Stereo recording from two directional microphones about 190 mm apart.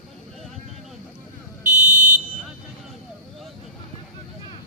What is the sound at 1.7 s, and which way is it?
Buzzer, 40° right (ahead or behind).